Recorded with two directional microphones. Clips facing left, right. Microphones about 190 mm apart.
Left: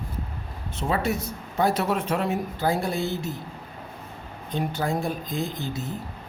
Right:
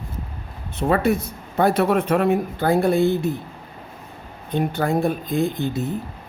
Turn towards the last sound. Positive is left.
turn(degrees=-60)  # may be behind; listen again after turning